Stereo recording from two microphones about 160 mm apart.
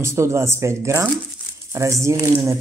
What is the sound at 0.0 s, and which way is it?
Speech, 15° right (ahead or behind).